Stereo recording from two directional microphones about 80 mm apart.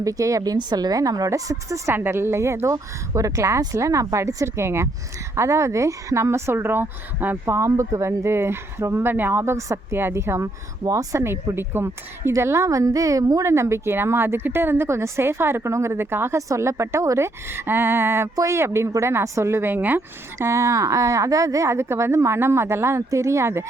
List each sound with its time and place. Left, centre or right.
0.0 s speech: right
0.5 s a woman's voice: right
7.4 s a woman's voice: right
11.2 s a woman's voice: right
20.4 s a woman's voice: right